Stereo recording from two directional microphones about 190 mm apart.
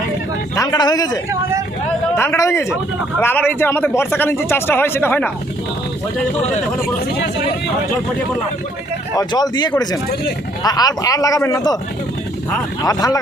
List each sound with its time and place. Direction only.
0.5 s speech: 20° left (ahead or behind)
1.3 s speech: 15° right (ahead or behind)
2.1 s a man's voice: 15° left (ahead or behind)
9.1 s a man's voice: 20° left (ahead or behind)
12.8 s speech: 20° left (ahead or behind)